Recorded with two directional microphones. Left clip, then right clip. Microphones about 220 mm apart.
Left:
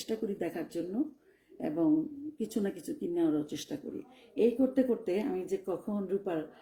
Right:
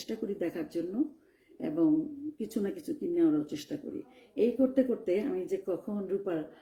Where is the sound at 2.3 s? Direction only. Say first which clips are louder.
Left 1 dB; 5° left (ahead or behind).